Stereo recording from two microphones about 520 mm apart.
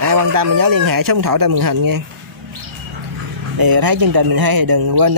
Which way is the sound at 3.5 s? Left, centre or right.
Right.